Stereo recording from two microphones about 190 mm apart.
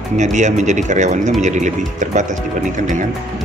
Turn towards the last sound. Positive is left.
turn(degrees=-40)  # may be behind; listen again after turning